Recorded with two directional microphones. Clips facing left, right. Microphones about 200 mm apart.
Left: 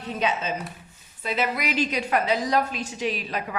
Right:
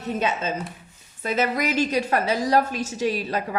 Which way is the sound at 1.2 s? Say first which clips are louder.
Right 3 dB; 45° right (ahead or behind).